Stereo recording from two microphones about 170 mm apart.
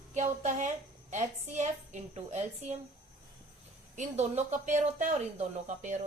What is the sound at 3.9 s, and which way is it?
Speech, 40° right (ahead or behind).